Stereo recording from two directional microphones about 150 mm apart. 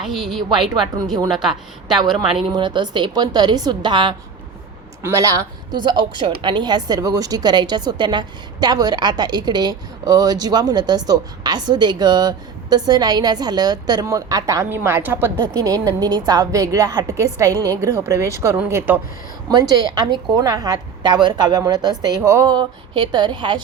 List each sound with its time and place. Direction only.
0.0 s a woman's voice: centre (ahead or behind)
2.5 s a woman's voice: 30° right (ahead or behind); by 18.9 s 10° right (ahead or behind)
19.5 s a woman's voice: 25° right (ahead or behind)